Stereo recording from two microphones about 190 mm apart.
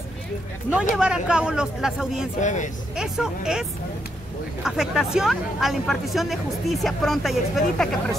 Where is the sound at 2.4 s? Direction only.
40° left (ahead or behind).